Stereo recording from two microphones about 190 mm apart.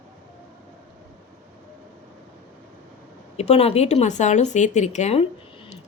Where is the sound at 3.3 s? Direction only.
35° left (ahead or behind).